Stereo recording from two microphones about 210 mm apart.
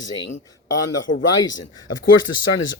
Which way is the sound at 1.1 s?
65° left (ahead or behind).